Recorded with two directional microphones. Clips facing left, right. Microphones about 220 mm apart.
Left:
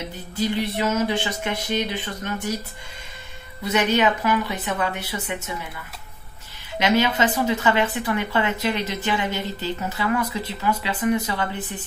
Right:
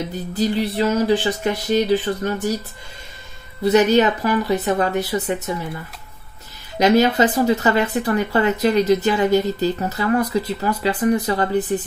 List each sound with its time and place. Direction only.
0.4 s speech: 35° right (ahead or behind)
3.6 s speech: 35° right (ahead or behind)
6.8 s speech: 40° right (ahead or behind)